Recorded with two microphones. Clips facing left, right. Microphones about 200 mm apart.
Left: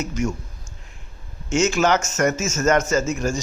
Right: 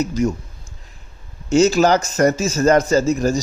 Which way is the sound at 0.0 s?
35° right (ahead or behind).